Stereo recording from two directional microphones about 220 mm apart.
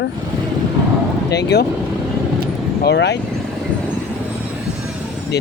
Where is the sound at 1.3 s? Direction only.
50° left (ahead or behind).